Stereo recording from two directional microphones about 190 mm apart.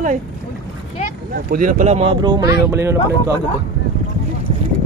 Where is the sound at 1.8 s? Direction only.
35° right (ahead or behind); by 3.4 s 15° right (ahead or behind).